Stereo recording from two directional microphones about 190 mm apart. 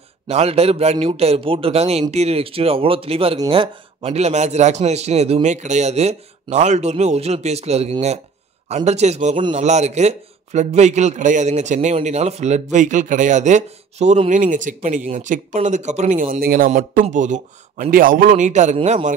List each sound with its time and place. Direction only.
0.3 s a man's voice: 30° right (ahead or behind)